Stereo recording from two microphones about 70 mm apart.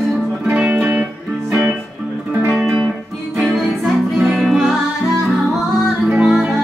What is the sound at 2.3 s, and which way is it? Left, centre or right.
Music, right.